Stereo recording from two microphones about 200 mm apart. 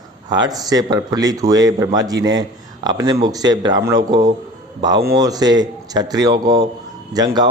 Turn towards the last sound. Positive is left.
turn(degrees=-20)  # may be behind; listen again after turning